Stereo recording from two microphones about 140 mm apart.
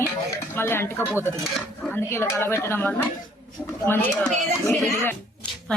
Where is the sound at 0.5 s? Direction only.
15° left (ahead or behind).